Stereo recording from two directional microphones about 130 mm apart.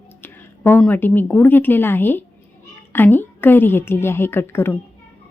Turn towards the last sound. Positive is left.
turn(degrees=15)  # may be behind; listen again after turning